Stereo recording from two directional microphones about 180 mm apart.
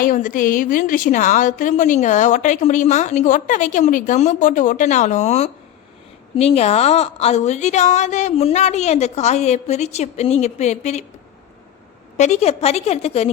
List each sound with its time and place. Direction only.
0.0 s a woman's voice: 45° left (ahead or behind)
12.1 s a woman's voice: 40° left (ahead or behind)